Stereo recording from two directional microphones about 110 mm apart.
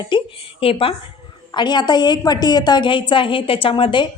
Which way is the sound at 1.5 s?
40° left (ahead or behind).